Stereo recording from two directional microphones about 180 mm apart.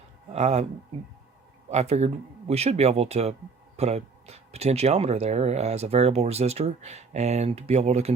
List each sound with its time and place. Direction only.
0.3 s speech: 35° right (ahead or behind)
1.7 s speech: 35° right (ahead or behind)